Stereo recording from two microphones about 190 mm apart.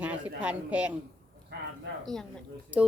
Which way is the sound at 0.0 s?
10° right (ahead or behind).